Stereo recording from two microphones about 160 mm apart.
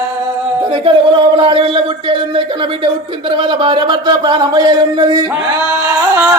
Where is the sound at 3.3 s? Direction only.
30° right (ahead or behind).